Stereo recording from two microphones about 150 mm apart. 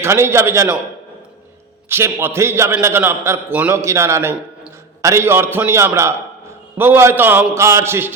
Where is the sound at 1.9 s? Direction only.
15° right (ahead or behind).